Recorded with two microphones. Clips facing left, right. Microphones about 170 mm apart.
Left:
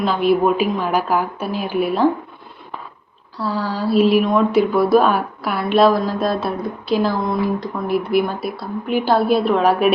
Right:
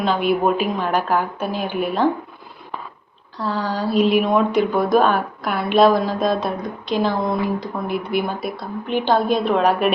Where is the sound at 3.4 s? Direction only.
10° left (ahead or behind).